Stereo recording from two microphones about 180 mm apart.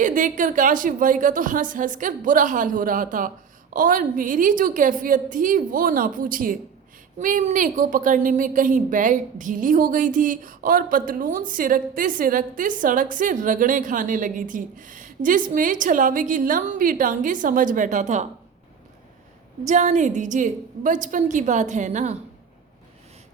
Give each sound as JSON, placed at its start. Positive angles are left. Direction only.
{"t": 0.0, "sound": "a woman's voice", "side_deg": -45}
{"t": 19.6, "sound": "a woman's voice", "side_deg": -40}